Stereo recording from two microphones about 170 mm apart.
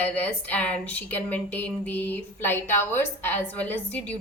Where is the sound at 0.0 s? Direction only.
10° left (ahead or behind).